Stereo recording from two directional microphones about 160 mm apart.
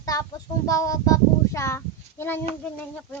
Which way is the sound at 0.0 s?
20° left (ahead or behind).